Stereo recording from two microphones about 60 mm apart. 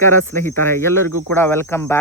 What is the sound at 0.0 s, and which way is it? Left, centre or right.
Speech, left.